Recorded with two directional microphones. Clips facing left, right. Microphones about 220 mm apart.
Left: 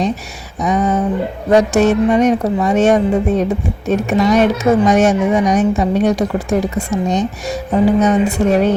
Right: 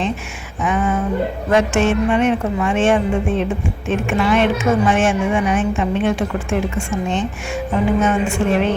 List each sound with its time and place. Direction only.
0.6 s a woman's voice: 40° left (ahead or behind)